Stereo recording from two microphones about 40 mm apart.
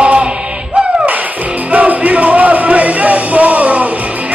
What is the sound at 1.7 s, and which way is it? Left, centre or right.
Music, right.